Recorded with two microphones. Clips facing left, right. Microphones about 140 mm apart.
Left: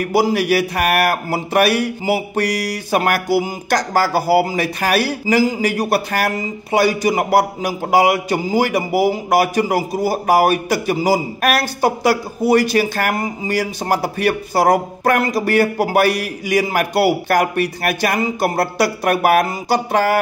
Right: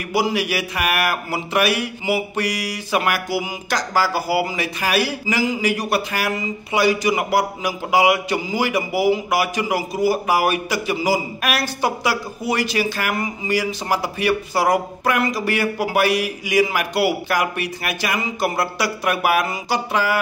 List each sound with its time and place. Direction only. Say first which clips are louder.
0.0 s speech: left 5 dB; 40° left (ahead or behind)
2.9 s a sound: left 4 dB; 45° left (ahead or behind)
3.7 s speech: left 4 dB; 50° left (ahead or behind)